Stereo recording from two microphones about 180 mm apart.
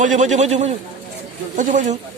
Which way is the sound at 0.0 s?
45° right (ahead or behind).